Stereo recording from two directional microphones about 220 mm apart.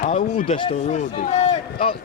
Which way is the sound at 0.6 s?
30° left (ahead or behind).